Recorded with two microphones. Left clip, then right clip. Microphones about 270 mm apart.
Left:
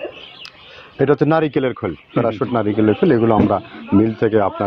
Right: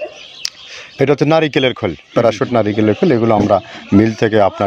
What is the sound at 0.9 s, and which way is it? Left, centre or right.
Speech, right.